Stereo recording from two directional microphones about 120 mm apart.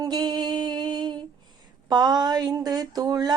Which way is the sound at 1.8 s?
35° right (ahead or behind).